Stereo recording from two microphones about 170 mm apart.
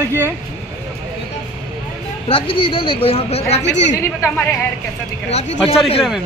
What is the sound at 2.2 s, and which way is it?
A woman's voice, 30° left (ahead or behind).